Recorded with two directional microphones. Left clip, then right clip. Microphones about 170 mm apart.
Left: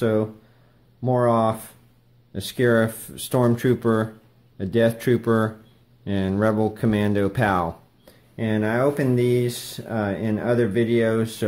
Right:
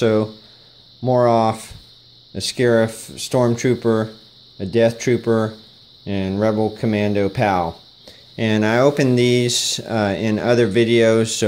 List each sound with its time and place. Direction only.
0.0 s speech: 25° right (ahead or behind); by 7.6 s 10° right (ahead or behind)
8.4 s speech: 35° right (ahead or behind)